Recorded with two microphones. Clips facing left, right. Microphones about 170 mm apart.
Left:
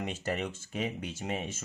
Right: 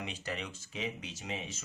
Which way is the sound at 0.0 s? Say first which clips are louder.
Left 6 dB; 45° left (ahead or behind).